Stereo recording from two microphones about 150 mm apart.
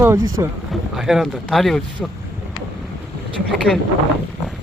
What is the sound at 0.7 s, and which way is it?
Speech, centre (ahead or behind).